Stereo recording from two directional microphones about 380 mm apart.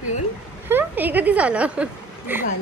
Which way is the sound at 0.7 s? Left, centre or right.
Centre.